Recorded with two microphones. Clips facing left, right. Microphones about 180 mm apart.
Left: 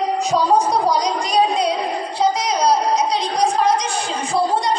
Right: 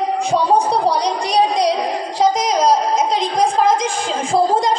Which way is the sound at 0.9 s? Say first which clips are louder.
Right 1 dB; 65° right (ahead or behind).